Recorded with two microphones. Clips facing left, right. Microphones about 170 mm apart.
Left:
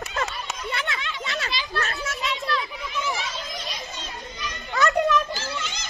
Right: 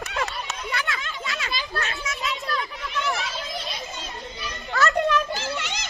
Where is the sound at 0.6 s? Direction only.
25° left (ahead or behind).